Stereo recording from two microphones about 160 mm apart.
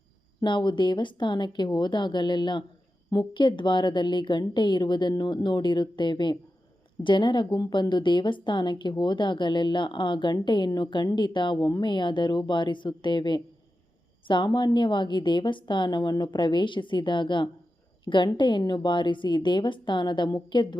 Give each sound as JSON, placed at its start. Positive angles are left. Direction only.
{"t": 0.4, "sound": "a woman's voice", "side_deg": 30}